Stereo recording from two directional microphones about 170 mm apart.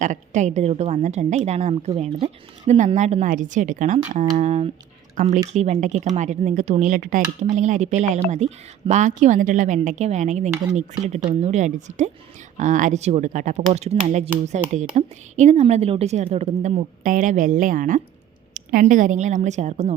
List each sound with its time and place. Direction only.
0.0 s a woman's voice: 45° right (ahead or behind)
13.6 s a woman's voice: 40° right (ahead or behind)